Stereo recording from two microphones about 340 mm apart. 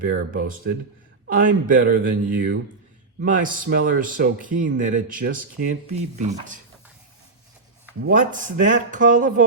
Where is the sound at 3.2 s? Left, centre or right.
Right.